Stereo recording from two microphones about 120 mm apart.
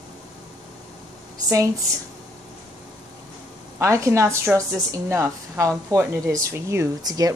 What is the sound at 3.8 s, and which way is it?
A woman's voice, 25° right (ahead or behind).